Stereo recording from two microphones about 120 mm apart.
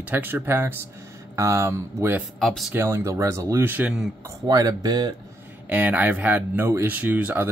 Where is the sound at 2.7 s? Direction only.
20° right (ahead or behind).